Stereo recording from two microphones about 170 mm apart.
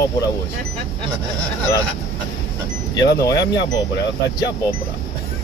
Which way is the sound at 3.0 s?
20° left (ahead or behind).